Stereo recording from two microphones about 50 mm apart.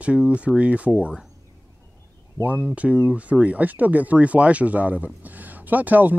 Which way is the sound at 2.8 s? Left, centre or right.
Right.